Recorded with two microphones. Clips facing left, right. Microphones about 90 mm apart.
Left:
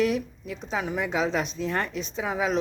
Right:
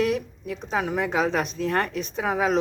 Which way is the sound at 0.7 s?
55° right (ahead or behind).